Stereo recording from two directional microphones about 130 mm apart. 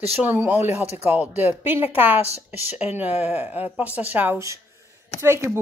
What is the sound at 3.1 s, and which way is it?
Speech, 50° left (ahead or behind).